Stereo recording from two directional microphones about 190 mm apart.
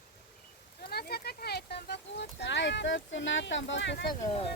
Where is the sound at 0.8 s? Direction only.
55° left (ahead or behind).